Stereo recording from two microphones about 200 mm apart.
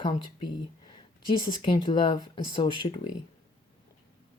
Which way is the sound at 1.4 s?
20° left (ahead or behind).